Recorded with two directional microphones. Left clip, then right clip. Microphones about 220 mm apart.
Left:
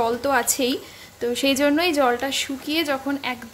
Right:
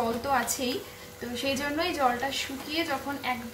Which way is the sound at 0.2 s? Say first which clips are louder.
Left 7 dB; 45° left (ahead or behind).